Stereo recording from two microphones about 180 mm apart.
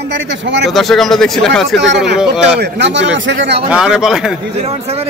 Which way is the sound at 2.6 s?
75° right (ahead or behind).